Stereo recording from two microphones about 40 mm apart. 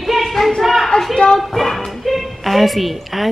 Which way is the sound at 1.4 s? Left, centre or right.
Centre.